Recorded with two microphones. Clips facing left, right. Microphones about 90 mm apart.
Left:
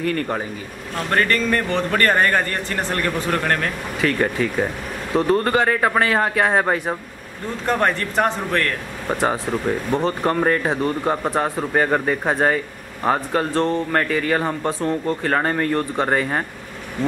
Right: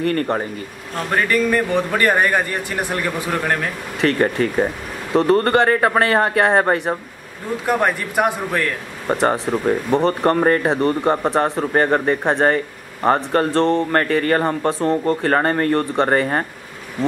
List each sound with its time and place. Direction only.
1.1 s a man's voice: 10° right (ahead or behind)
9.1 s speech: centre (ahead or behind)